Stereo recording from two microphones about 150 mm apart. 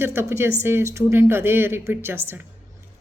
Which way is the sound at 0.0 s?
15° right (ahead or behind).